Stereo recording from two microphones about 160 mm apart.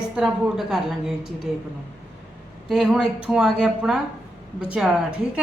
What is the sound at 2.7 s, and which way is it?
A woman's voice, 5° right (ahead or behind).